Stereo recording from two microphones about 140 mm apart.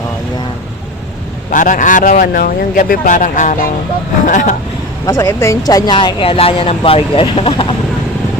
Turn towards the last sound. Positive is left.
turn(degrees=40)  # may be behind; listen again after turning